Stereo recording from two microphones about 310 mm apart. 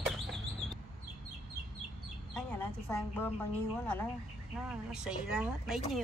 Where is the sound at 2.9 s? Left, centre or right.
Centre.